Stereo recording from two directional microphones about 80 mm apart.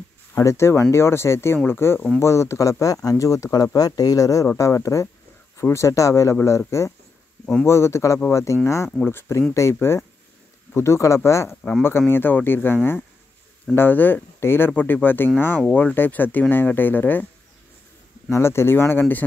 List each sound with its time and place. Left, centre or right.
0.4 s speech: left
12.1 s speech: left
18.3 s speech: left